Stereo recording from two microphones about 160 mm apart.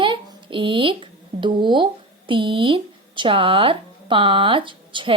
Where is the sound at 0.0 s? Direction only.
30° right (ahead or behind).